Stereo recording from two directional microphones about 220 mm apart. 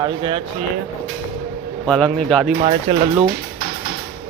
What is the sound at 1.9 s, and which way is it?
Speech, 5° left (ahead or behind).